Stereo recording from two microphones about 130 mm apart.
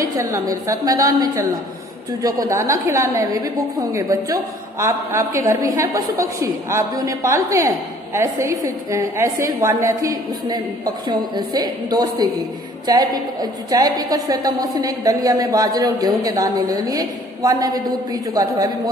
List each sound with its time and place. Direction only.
0.2 s a woman's voice: 25° right (ahead or behind)